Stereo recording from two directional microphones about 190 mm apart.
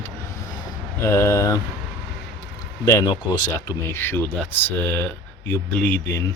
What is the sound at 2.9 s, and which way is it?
Speech, 20° left (ahead or behind).